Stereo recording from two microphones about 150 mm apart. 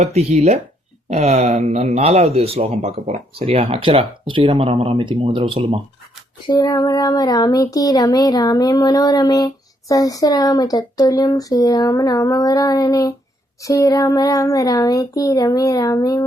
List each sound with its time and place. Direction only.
0.0 s speech: 45° right (ahead or behind)
6.5 s speech: 25° left (ahead or behind)